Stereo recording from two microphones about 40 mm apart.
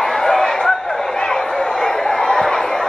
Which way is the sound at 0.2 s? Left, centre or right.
Centre.